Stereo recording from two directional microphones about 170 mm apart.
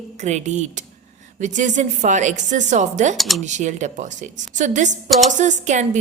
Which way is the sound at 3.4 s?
45° right (ahead or behind).